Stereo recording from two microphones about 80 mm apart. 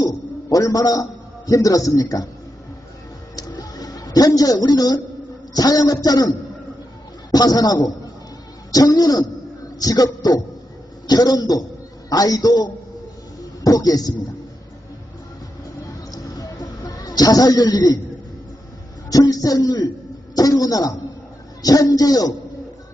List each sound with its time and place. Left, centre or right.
0.0 s music: left
1.5 s a man's voice: left
3.3 s a sound: left
5.5 s a man's voice: left
13.7 s a man's voice: left
16.1 s music: left
19.1 s a man's voice: left